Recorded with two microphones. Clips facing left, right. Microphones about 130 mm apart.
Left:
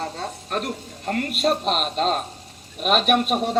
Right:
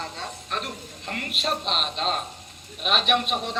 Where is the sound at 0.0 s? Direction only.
40° left (ahead or behind).